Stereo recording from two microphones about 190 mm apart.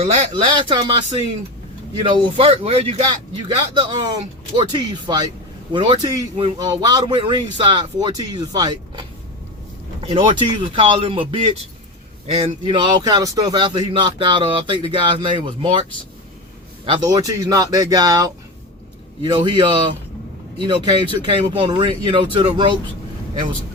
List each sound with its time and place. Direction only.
0.0 s speech: 35° right (ahead or behind)
2.3 s speech: 30° right (ahead or behind)